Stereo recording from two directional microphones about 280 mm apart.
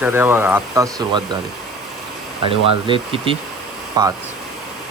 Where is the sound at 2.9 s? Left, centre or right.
Centre.